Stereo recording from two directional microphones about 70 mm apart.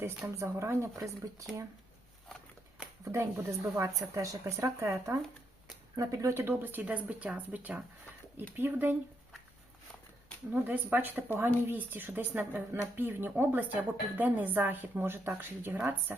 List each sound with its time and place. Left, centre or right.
0.3 s speech: right
3.1 s speech: right
4.2 s speech: right
6.3 s a woman's voice: right
10.5 s a woman's voice: right